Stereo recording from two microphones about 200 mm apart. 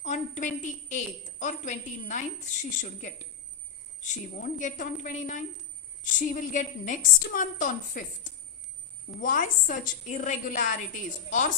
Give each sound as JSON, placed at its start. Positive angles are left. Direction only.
{"t": 0.0, "sound": "a woman's voice", "side_deg": 40}
{"t": 9.2, "sound": "a woman's voice", "side_deg": 40}